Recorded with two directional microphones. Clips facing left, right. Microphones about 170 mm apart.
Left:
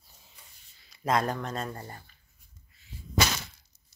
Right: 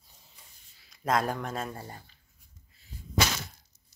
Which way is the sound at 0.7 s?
Centre (ahead or behind).